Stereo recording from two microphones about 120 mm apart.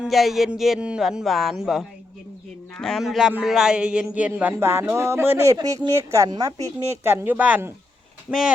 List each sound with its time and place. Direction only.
0.0 s speech: centre (ahead or behind); by 5.5 s 20° right (ahead or behind)
5.5 s speech: 35° right (ahead or behind); by 8.4 s 15° right (ahead or behind)